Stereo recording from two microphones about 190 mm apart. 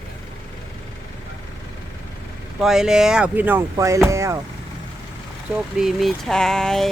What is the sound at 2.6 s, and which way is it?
Speech, centre (ahead or behind).